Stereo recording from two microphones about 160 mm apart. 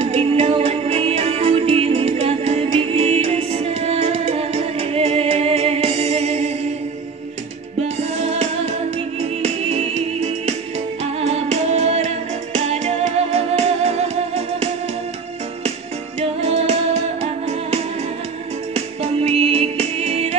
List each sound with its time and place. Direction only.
0.0 s music: 40° right (ahead or behind)
8.0 s music: 40° right (ahead or behind)
16.2 s music: 40° right (ahead or behind)
19.2 s music: 40° right (ahead or behind)